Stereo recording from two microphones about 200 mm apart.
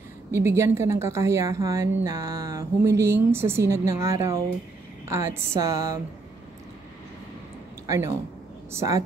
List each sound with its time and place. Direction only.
0.3 s a woman's voice: 10° right (ahead or behind)
7.8 s a woman's voice: 15° right (ahead or behind)